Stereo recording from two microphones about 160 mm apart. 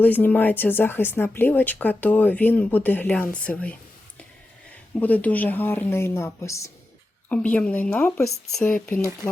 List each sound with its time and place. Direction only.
0.0 s speech: 10° left (ahead or behind)
4.9 s speech: 10° left (ahead or behind)